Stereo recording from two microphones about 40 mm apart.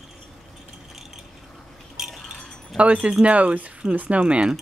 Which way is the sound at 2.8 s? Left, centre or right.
Right.